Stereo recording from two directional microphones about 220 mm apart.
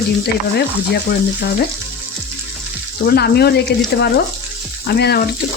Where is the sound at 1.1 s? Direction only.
45° left (ahead or behind).